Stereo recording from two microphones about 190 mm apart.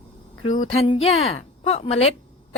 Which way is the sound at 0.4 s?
35° left (ahead or behind).